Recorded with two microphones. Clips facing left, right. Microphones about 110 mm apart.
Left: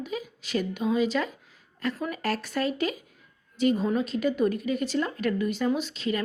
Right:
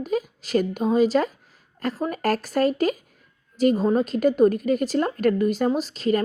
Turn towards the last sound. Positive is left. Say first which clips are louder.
# right 6 dB
turn(degrees=-40)  # may be behind; listen again after turning